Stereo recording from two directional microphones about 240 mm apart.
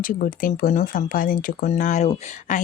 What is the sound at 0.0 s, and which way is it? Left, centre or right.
Speech, left.